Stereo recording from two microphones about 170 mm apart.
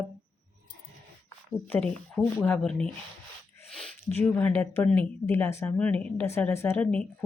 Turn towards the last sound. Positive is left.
turn(degrees=10)  # may be behind; listen again after turning